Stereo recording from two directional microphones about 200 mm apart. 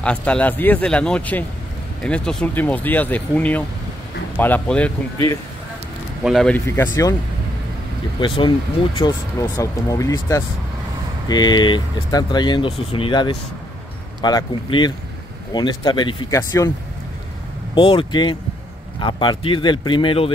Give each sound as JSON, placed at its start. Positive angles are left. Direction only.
{"t": 0.0, "sound": "speech", "side_deg": 5}
{"t": 6.2, "sound": "speech", "side_deg": 5}
{"t": 6.8, "sound": "speech", "side_deg": 15}
{"t": 8.2, "sound": "speech", "side_deg": 25}
{"t": 17.7, "sound": "speech", "side_deg": 25}